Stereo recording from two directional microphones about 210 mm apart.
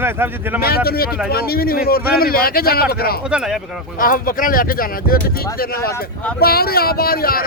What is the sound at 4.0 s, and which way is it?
Speech, 40° left (ahead or behind).